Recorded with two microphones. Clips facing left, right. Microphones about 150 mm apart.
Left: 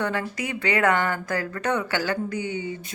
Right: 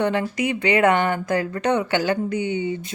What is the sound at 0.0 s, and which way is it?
Speech, 20° right (ahead or behind).